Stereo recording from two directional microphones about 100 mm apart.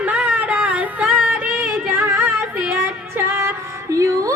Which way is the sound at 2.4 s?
25° right (ahead or behind).